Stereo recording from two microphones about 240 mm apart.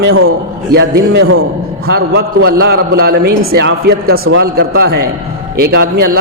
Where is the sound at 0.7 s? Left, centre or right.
Right.